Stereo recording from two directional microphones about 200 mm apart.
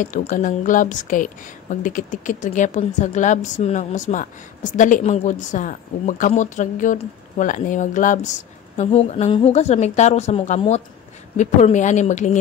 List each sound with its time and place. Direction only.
0.0 s a woman's voice: 40° left (ahead or behind)